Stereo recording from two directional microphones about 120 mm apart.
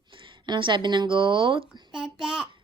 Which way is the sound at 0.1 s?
45° right (ahead or behind).